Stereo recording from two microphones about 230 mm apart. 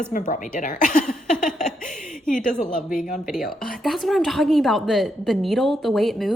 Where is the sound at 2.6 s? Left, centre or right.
Left.